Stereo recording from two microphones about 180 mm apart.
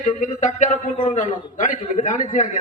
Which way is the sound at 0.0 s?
45° left (ahead or behind).